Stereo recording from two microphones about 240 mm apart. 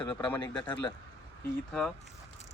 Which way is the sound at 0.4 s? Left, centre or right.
Centre.